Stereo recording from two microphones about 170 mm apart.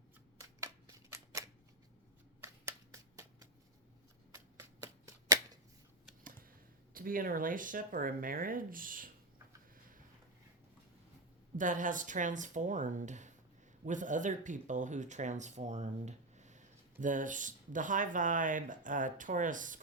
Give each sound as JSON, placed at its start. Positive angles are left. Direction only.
{"t": 0.3, "sound": "typewriter", "side_deg": -20}
{"t": 2.4, "sound": "a sound", "side_deg": -15}
{"t": 4.3, "sound": "shuffling cards", "side_deg": -20}
{"t": 6.9, "sound": "speech", "side_deg": -55}
{"t": 11.5, "sound": "speech", "side_deg": -50}